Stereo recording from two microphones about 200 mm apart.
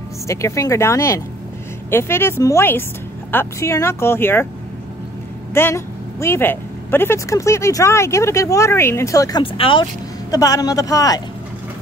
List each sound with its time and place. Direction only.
0.3 s speech: 15° left (ahead or behind)
5.5 s speech: 10° left (ahead or behind)